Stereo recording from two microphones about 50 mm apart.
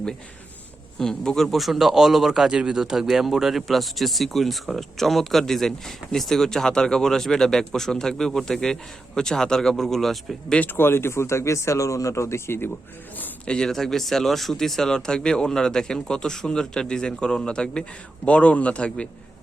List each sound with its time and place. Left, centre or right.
0.9 s speech: centre
10.8 s speech: left
13.5 s a man's voice: centre